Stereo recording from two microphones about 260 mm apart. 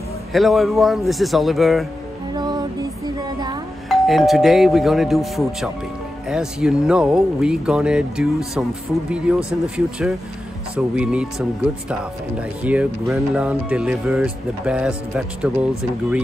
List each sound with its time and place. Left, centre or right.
0.3 s speech: centre
2.3 s music: centre
3.2 s a sound: centre
3.9 s speech: centre
9.5 s speech: centre